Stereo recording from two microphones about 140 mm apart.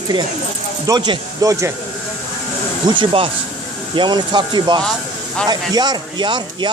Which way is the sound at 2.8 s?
35° right (ahead or behind).